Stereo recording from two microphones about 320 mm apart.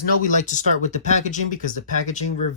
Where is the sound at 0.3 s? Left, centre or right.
Left.